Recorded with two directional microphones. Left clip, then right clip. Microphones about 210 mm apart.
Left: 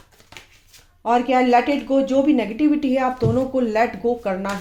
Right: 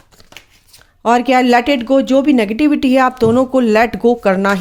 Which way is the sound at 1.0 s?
50° right (ahead or behind).